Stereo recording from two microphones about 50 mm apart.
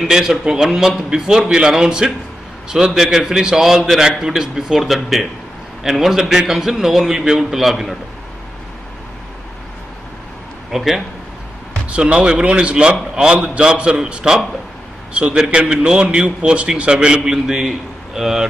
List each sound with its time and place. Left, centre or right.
0.0 s a man's voice: centre
10.7 s a man's voice: centre
11.9 s a man's voice: centre